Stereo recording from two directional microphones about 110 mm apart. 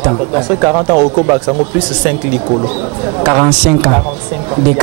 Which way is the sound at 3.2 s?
20° right (ahead or behind).